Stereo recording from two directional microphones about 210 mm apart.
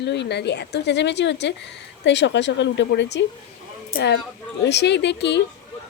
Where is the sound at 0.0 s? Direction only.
55° left (ahead or behind).